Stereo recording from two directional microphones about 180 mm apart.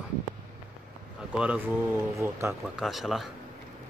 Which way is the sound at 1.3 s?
5° right (ahead or behind).